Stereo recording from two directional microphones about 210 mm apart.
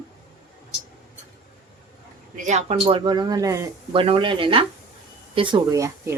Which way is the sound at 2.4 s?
30° right (ahead or behind).